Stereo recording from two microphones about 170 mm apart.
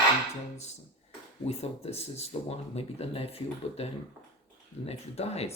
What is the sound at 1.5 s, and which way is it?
Speech, 40° left (ahead or behind).